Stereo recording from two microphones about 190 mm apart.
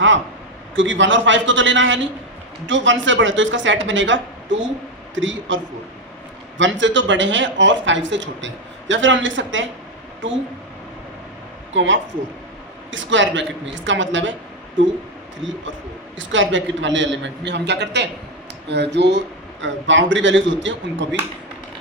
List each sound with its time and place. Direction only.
0.8 s speech: 75° right (ahead or behind)
6.6 s speech: 75° right (ahead or behind)
11.7 s speech: 75° right (ahead or behind)
16.1 s speech: 80° right